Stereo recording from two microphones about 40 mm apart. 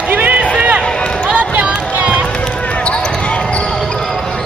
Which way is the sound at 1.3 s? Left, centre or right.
Right.